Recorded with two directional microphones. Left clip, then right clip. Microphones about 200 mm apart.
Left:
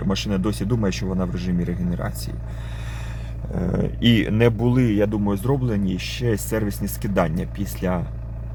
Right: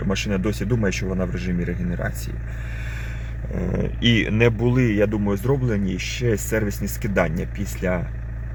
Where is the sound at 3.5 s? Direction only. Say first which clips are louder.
Left 1 dB; 15° left (ahead or behind).